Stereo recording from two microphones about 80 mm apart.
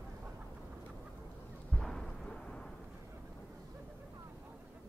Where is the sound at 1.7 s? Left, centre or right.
Centre.